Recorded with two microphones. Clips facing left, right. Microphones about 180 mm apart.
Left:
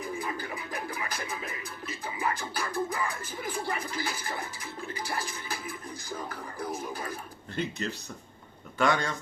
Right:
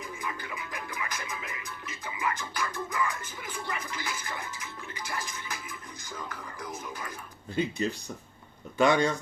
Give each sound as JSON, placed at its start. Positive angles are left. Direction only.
{"t": 0.0, "sound": "music", "side_deg": 35}
{"t": 6.1, "sound": "speech", "side_deg": 30}
{"t": 7.5, "sound": "speech", "side_deg": -10}